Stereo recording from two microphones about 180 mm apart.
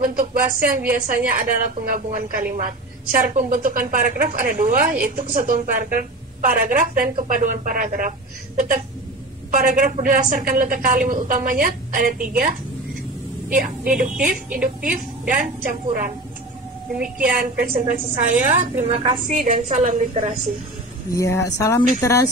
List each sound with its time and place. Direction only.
0.0 s a woman's voice: 50° right (ahead or behind)
13.5 s a woman's voice: 45° right (ahead or behind)
21.1 s a woman's voice: 15° left (ahead or behind)